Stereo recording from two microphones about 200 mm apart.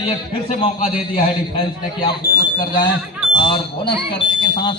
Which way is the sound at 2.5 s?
25° left (ahead or behind).